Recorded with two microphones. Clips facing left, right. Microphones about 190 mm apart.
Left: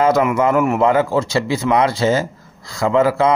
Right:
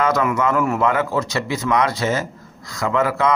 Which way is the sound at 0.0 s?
25° left (ahead or behind).